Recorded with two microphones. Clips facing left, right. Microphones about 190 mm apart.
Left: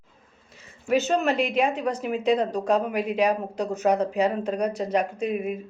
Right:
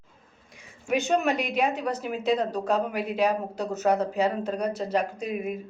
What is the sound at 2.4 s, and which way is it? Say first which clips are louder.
Speech: left 2 dB; 10° left (ahead or behind).